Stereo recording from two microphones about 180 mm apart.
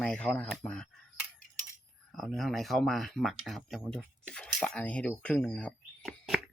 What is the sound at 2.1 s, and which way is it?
Speech, centre (ahead or behind).